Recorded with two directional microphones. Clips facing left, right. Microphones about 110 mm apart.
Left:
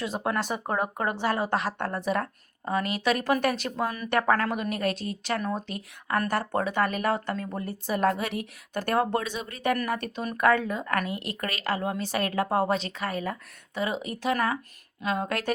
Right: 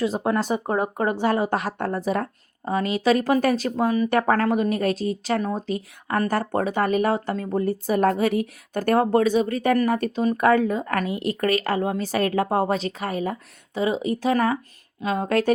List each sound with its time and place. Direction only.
0.2 s a woman's voice: 25° right (ahead or behind)
1.1 s a woman's voice: 45° right (ahead or behind)